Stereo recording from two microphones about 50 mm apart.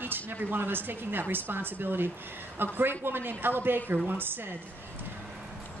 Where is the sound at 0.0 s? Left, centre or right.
Right.